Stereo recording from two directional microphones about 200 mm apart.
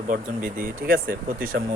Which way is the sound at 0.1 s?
45° right (ahead or behind).